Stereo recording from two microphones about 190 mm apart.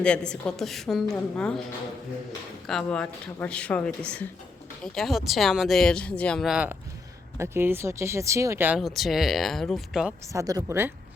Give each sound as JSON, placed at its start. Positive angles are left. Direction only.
{"t": 0.0, "sound": "a woman's voice", "side_deg": 5}
{"t": 2.6, "sound": "a woman's voice", "side_deg": 5}
{"t": 8.8, "sound": "a woman's voice", "side_deg": 0}
{"t": 10.3, "sound": "speech", "side_deg": -15}